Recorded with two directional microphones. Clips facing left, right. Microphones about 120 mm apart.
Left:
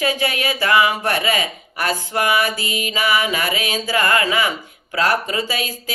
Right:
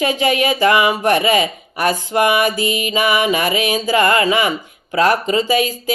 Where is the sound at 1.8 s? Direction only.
20° right (ahead or behind).